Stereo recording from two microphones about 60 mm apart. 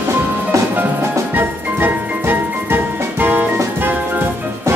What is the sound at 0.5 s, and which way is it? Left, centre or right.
Music, right.